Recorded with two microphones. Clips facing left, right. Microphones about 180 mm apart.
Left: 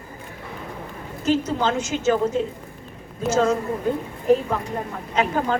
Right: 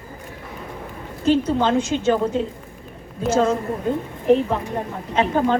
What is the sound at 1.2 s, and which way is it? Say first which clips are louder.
Speech: right 3 dB; 30° right (ahead or behind).